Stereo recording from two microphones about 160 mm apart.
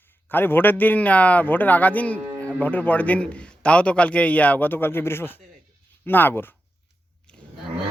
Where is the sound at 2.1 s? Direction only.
15° right (ahead or behind).